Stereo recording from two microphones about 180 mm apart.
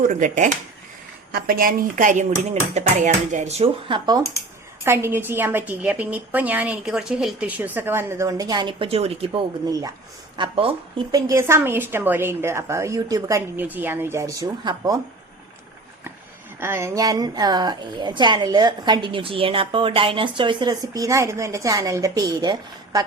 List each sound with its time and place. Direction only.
0.0 s speech: 45° right (ahead or behind)
1.3 s speech: 55° right (ahead or behind); by 4.2 s 25° right (ahead or behind)
4.8 s a woman's voice: 15° right (ahead or behind); by 9.4 s 35° right (ahead or behind)
9.6 s a woman's voice: 20° right (ahead or behind)
11.3 s a woman's voice: 15° right (ahead or behind)
16.6 s a woman's voice: 15° right (ahead or behind)